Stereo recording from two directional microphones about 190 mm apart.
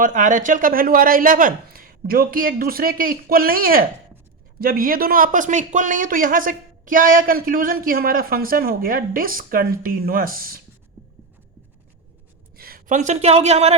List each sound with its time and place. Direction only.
0.0 s speech: 45° right (ahead or behind)
12.5 s a woman's voice: 50° right (ahead or behind); by 13.7 s 35° right (ahead or behind)